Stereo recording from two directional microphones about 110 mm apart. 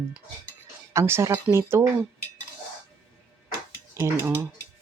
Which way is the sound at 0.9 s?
25° right (ahead or behind).